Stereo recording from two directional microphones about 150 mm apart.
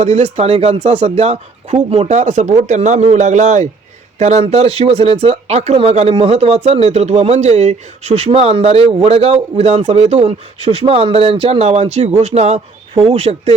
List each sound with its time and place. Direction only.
0.0 s speech: 45° right (ahead or behind)